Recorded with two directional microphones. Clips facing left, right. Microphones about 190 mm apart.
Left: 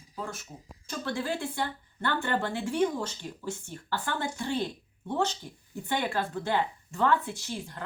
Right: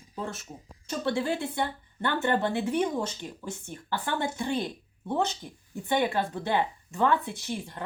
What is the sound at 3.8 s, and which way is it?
Speech, 20° right (ahead or behind).